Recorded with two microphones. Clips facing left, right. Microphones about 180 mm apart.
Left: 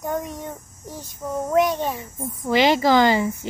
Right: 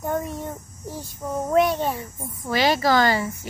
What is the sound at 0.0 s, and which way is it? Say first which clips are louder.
A child's voice: right 1 dB; 5° right (ahead or behind).